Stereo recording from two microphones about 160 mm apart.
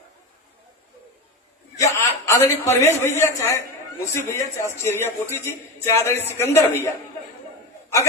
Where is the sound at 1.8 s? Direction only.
20° left (ahead or behind).